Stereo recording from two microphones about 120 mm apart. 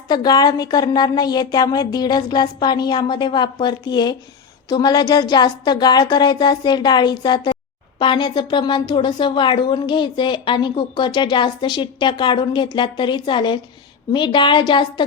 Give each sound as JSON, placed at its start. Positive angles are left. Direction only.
{"t": 0.1, "sound": "speech", "side_deg": 35}